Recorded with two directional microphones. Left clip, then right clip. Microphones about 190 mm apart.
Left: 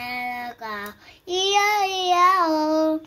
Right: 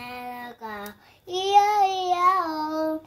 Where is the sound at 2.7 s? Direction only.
5° left (ahead or behind).